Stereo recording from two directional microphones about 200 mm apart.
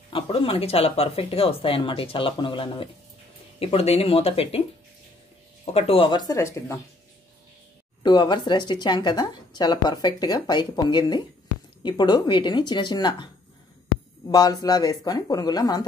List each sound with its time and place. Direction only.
0.1 s speech: 25° left (ahead or behind)
5.7 s speech: 30° left (ahead or behind); by 6.8 s 15° left (ahead or behind)
8.0 s speech: 20° left (ahead or behind)